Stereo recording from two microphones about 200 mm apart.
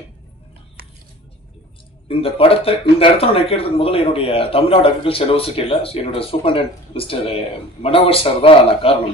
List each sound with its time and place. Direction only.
2.0 s speech: 30° left (ahead or behind)